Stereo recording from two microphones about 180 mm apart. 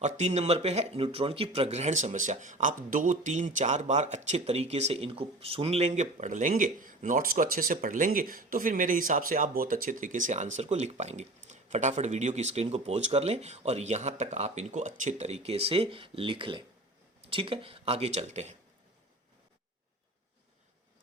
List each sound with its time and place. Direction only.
0.2 s speech: 35° right (ahead or behind)